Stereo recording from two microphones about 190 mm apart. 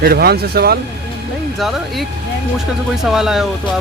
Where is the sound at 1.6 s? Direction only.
Centre (ahead or behind).